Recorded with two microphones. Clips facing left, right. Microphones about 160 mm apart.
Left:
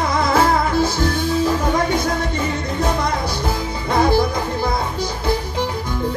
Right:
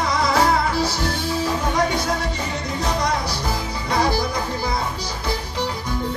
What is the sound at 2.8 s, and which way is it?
Music, 50° left (ahead or behind).